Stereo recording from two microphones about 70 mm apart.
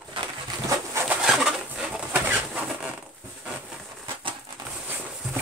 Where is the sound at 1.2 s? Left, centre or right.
Centre.